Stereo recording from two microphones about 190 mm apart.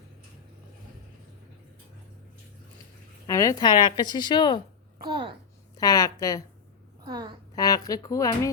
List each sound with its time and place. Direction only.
3.2 s a woman's voice: 15° left (ahead or behind)
5.0 s a child's voice: 25° right (ahead or behind)
5.7 s a woman's voice: 20° left (ahead or behind)
7.0 s a woman's voice: 20° right (ahead or behind)
7.5 s a woman's voice: 20° left (ahead or behind)